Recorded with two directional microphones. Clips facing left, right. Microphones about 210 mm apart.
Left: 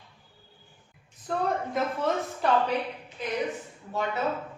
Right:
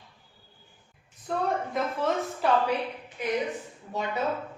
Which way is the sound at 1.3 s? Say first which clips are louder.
Even; centre (ahead or behind).